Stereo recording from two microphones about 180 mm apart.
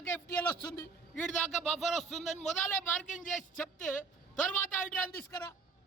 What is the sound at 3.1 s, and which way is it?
Speech, 45° left (ahead or behind).